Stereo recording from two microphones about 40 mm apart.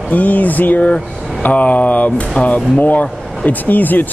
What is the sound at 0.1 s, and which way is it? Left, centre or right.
Speech, left.